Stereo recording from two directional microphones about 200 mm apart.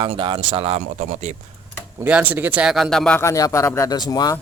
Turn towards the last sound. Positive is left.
turn(degrees=20)  # may be behind; listen again after turning